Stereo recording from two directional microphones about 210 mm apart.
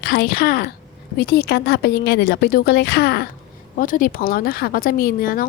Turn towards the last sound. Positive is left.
turn(degrees=45)  # may be behind; listen again after turning